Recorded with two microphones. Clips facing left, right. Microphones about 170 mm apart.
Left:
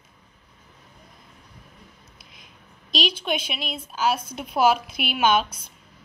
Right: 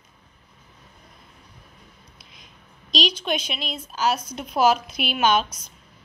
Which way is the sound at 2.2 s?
55° left (ahead or behind).